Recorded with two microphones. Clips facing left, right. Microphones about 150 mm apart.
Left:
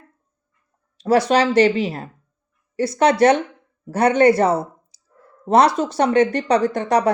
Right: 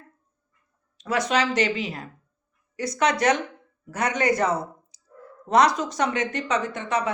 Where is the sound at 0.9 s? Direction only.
35° left (ahead or behind).